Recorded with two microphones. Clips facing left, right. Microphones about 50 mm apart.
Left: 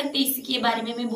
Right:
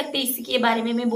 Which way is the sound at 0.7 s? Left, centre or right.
Right.